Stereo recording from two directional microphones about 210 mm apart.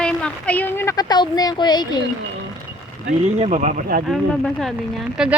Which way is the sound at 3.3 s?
30° right (ahead or behind).